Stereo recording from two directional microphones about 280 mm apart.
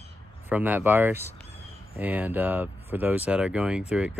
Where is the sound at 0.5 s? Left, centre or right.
Centre.